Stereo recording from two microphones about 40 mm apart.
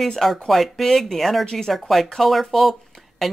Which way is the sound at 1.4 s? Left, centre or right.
Centre.